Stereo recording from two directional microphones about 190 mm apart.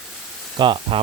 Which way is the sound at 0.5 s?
25° right (ahead or behind).